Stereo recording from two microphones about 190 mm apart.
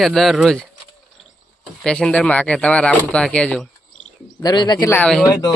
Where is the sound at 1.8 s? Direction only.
5° left (ahead or behind).